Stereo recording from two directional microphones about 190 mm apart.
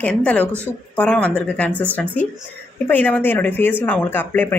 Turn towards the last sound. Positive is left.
turn(degrees=10)  # may be behind; listen again after turning